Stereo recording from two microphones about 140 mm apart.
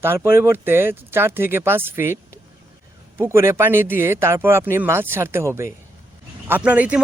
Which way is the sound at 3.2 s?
20° right (ahead or behind).